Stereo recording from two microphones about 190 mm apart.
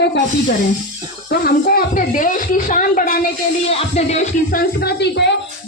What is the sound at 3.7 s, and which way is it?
Music, 35° left (ahead or behind).